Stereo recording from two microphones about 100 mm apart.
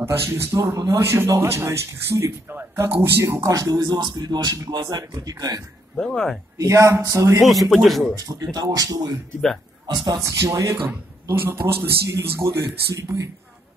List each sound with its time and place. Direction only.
0.0 s a man's voice: 25° right (ahead or behind)
0.7 s speech: 40° right (ahead or behind)
0.9 s speech: 25° right (ahead or behind)
5.9 s speech: 5° left (ahead or behind)
6.6 s speech: 30° right (ahead or behind)
7.4 s speech: centre (ahead or behind)
8.2 s a man's voice: 40° right (ahead or behind)